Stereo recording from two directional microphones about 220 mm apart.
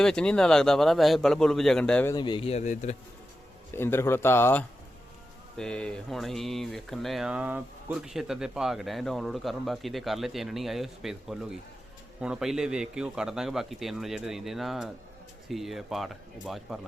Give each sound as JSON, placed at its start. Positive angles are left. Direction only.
{"t": 0.0, "sound": "speech", "side_deg": 5}
{"t": 2.1, "sound": "speech", "side_deg": 20}
{"t": 3.8, "sound": "speech", "side_deg": 10}